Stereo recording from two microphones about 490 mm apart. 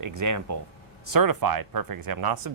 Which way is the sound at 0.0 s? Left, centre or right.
Right.